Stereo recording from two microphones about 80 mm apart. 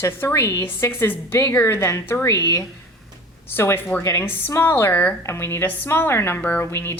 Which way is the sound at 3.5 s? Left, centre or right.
Left.